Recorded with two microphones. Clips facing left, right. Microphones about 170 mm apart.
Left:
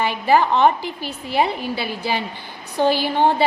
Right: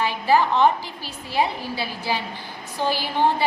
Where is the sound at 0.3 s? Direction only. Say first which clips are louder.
Left 2 dB; 65° left (ahead or behind).